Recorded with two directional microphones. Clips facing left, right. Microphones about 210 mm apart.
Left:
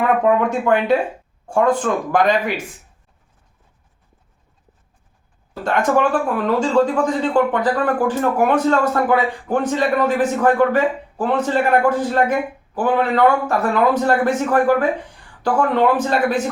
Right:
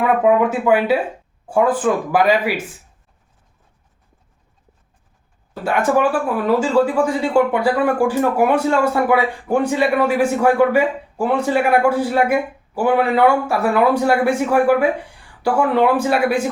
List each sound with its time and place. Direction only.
0.0 s speech: 5° right (ahead or behind)
5.6 s speech: 5° right (ahead or behind)